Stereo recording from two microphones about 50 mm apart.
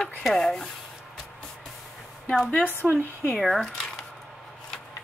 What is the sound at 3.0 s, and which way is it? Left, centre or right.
Speech, left.